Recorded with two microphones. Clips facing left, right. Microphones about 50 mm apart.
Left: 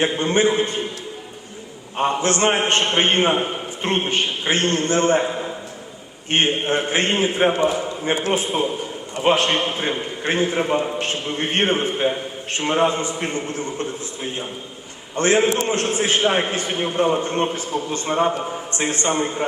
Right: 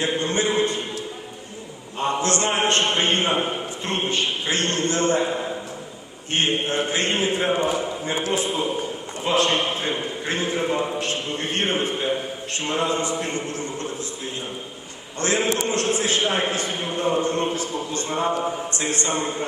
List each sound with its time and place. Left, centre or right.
0.0 s a man's voice: left
2.0 s a man's voice: left
6.3 s a man's voice: left
15.1 s a man's voice: left